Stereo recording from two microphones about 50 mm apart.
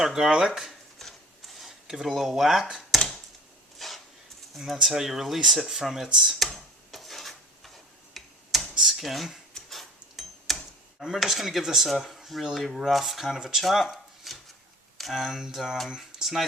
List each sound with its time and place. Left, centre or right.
0.0 s speech: centre
1.0 s printer: centre
1.5 s speech: centre
3.8 s a sound: centre
4.5 s speech: centre
6.5 s a sound: centre
8.1 s tick-tock: centre
8.5 s computer keyboard: centre
9.0 s speech: centre
9.6 s a sound: centre
11.0 s speech: centre
16.2 s speech: centre